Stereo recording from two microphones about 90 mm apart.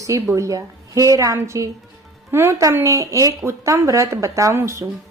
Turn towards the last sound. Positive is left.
turn(degrees=-30)  # may be behind; listen again after turning